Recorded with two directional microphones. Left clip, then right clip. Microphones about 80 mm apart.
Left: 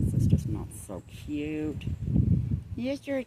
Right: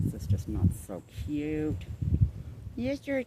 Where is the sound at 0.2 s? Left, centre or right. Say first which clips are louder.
Left 3 dB; right.